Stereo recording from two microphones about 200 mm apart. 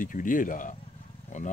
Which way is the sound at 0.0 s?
40° left (ahead or behind).